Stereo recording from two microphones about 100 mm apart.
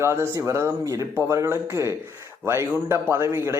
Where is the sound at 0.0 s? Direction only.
25° right (ahead or behind).